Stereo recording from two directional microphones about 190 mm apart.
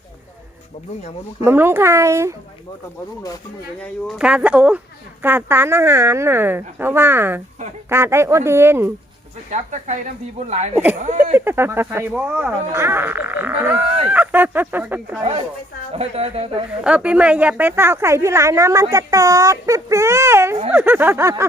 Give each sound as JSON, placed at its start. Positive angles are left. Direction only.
{"t": 1.5, "sound": "speech", "side_deg": -10}
{"t": 4.2, "sound": "speech", "side_deg": -5}
{"t": 9.5, "sound": "a woman's voice", "side_deg": -40}
{"t": 11.3, "sound": "speech", "side_deg": -10}
{"t": 15.2, "sound": "a woman's voice", "side_deg": -30}
{"t": 16.8, "sound": "speech", "side_deg": -5}